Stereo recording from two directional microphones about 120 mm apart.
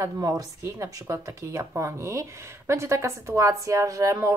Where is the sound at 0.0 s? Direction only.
30° right (ahead or behind).